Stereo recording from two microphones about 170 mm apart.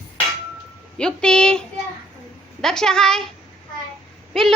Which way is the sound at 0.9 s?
5° left (ahead or behind).